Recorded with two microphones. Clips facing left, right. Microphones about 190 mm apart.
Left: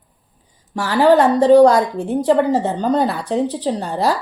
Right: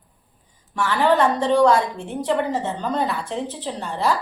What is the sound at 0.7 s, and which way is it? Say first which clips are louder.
Speech: left 6 dB; 35° left (ahead or behind).